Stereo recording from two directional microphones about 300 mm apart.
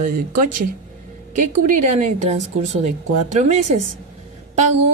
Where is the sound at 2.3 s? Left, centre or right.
Right.